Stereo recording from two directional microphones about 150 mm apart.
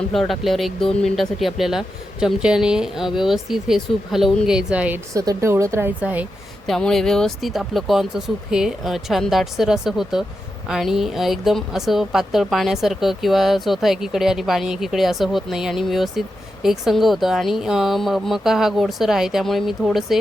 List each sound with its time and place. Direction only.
0.1 s speech: centre (ahead or behind)
5.1 s speech: 25° right (ahead or behind)
6.7 s speech: centre (ahead or behind)